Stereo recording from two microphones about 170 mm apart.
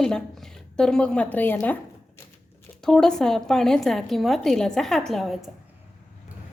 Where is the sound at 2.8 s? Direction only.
5° left (ahead or behind).